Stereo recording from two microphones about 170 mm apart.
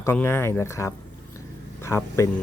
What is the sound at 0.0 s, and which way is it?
Speech, 15° left (ahead or behind).